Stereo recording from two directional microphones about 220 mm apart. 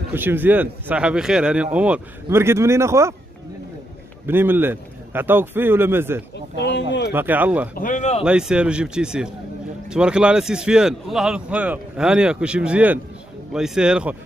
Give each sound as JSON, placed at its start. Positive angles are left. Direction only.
{"t": 0.1, "sound": "speech", "side_deg": -10}
{"t": 4.3, "sound": "speech", "side_deg": -10}
{"t": 6.5, "sound": "speech", "side_deg": 50}
{"t": 7.1, "sound": "speech", "side_deg": -10}
{"t": 7.7, "sound": "speech", "side_deg": 35}
{"t": 8.2, "sound": "a man's voice", "side_deg": -5}